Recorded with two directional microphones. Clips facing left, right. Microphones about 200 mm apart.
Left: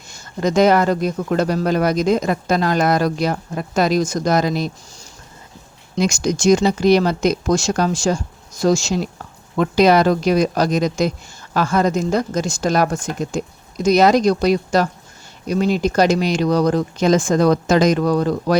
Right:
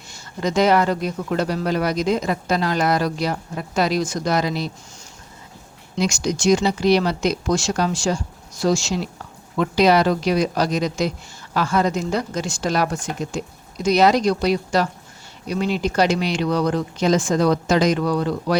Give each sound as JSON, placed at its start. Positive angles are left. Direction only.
{"t": 0.1, "sound": "speech", "side_deg": 45}
{"t": 6.0, "sound": "speech", "side_deg": 50}